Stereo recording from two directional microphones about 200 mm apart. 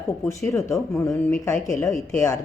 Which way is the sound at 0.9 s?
5° left (ahead or behind).